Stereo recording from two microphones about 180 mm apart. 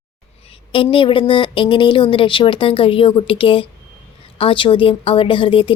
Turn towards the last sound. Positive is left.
turn(degrees=30)  # may be behind; listen again after turning